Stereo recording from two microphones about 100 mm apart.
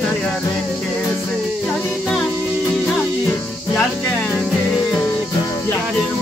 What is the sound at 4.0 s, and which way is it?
Music, 20° left (ahead or behind).